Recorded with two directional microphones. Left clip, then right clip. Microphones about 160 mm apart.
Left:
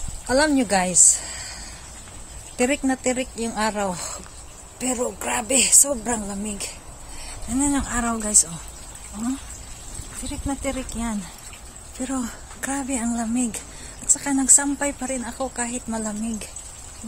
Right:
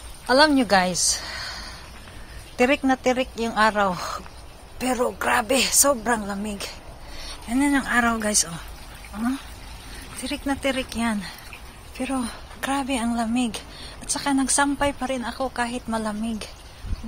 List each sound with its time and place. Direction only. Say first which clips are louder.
0.3 s speech: right 3 dB; 15° left (ahead or behind)
2.5 s a woman's voice: right 2 dB; 10° left (ahead or behind)
7.5 s speech: right 3 dB; centre (ahead or behind)
10.3 s speech: right 4 dB; 5° right (ahead or behind)
12.0 s a woman's voice: right 1 dB; 20° left (ahead or behind)